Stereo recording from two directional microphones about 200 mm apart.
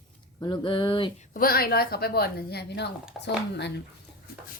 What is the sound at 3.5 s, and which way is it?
Speech, 60° left (ahead or behind).